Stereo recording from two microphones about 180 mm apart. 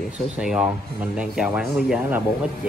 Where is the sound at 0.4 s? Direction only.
5° right (ahead or behind).